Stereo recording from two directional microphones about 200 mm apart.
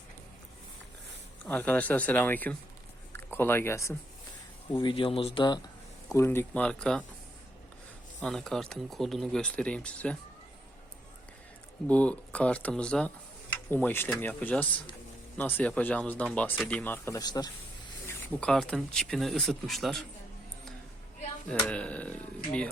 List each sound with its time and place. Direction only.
1.5 s speech: 10° left (ahead or behind)
4.7 s speech: 25° left (ahead or behind)
6.1 s speech: 15° left (ahead or behind)
8.2 s speech: 5° left (ahead or behind)
11.9 s speech: 5° left (ahead or behind)
21.7 s speech: 5° left (ahead or behind)